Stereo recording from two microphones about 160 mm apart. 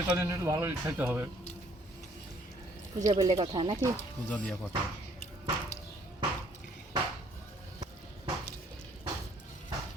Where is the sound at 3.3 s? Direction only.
30° right (ahead or behind).